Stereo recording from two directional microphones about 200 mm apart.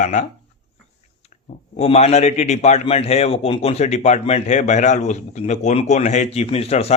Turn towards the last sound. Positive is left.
turn(degrees=30)  # may be behind; listen again after turning